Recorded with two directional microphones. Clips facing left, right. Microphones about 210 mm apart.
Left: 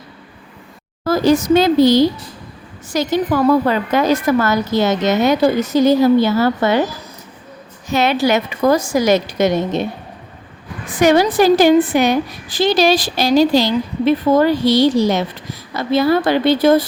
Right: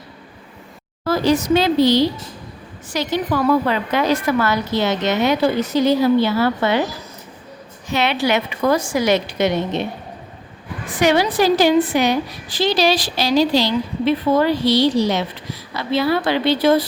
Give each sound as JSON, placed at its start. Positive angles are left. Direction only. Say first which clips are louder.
{"t": 1.0, "sound": "a woman's voice", "louder": "left 3 dB", "side_deg": 45}
{"t": 7.9, "sound": "a woman's voice", "louder": "left 4 dB", "side_deg": 45}
{"t": 11.0, "sound": "a woman's voice", "louder": "left 4 dB", "side_deg": 45}